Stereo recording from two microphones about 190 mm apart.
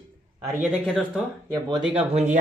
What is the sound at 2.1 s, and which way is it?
Speech, 35° right (ahead or behind).